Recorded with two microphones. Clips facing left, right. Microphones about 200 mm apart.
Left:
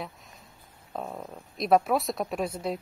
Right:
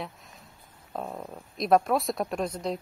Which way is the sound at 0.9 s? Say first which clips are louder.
Right 1 dB; centre (ahead or behind).